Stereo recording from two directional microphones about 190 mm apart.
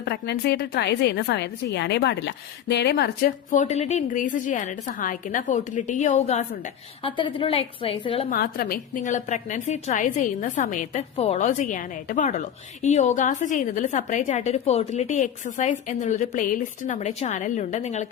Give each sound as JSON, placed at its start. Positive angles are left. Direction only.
{"t": 0.0, "sound": "a woman's voice", "side_deg": 60}
{"t": 8.3, "sound": "a woman's voice", "side_deg": 50}